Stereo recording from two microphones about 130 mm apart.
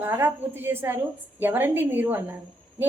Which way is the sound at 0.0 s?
15° right (ahead or behind).